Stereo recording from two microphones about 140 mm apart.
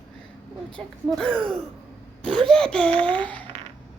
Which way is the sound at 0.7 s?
5° left (ahead or behind).